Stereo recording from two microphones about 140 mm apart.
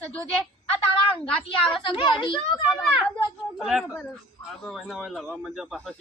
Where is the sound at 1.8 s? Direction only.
35° left (ahead or behind).